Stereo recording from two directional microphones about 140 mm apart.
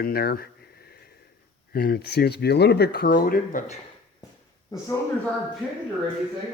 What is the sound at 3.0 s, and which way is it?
Speech, 90° left.